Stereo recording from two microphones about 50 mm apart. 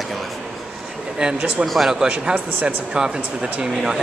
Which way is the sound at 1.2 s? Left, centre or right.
Centre.